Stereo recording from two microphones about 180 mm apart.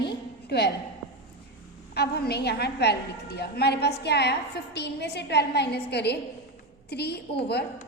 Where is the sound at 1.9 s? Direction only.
65° left (ahead or behind).